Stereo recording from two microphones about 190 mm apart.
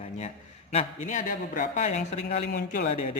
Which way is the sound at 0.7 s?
35° left (ahead or behind).